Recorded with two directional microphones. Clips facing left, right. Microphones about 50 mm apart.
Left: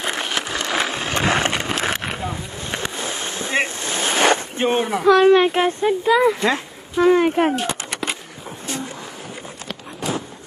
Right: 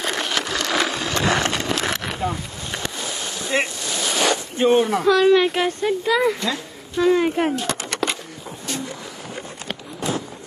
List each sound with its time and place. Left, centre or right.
0.0 s wood: centre
1.0 s a sound: left
5.1 s speech: left
5.6 s speech: left
6.4 s speech: left
7.2 s speech: left
7.6 s a sound: centre